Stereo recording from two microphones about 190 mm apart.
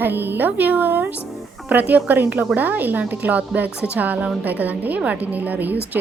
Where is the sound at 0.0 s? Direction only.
10° right (ahead or behind).